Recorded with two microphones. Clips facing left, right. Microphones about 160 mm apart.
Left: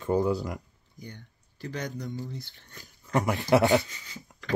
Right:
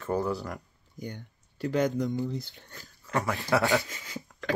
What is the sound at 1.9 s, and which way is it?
Speech, 75° right (ahead or behind).